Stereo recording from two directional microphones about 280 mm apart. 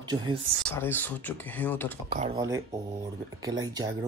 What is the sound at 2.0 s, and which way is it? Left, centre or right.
A child's voice, right.